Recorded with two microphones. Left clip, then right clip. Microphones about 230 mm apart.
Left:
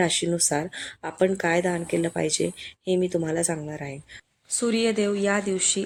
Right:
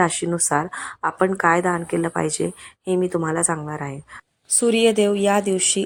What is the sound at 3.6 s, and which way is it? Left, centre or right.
Speech, right.